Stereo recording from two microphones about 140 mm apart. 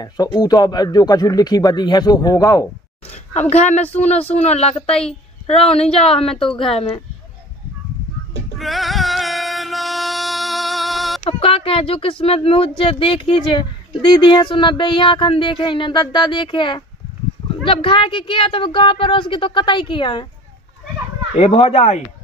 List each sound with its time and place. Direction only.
0.0 s speech: 30° left (ahead or behind)
3.3 s a woman's voice: 50° left (ahead or behind)
8.5 s music: centre (ahead or behind)
11.2 s speech: 40° left (ahead or behind)
21.4 s a woman's voice: 45° left (ahead or behind)